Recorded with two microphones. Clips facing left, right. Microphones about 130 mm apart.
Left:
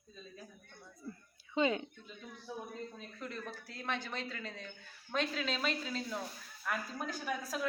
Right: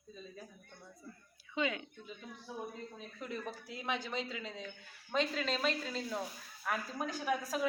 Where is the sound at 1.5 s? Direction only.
30° left (ahead or behind).